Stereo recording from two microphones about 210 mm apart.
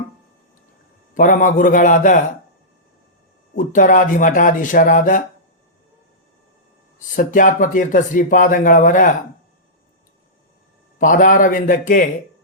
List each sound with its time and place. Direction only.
1.1 s speech: 40° left (ahead or behind)
3.5 s speech: 40° left (ahead or behind)
7.2 s speech: 40° left (ahead or behind)
10.9 s speech: 40° left (ahead or behind)